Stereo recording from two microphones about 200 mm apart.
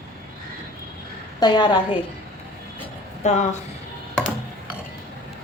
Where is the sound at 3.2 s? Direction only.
35° left (ahead or behind).